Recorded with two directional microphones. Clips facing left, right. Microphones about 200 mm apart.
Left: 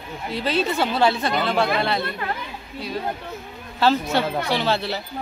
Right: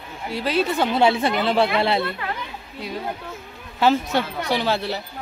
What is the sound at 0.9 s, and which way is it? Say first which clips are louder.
Speech: right 3 dB; 20° right (ahead or behind).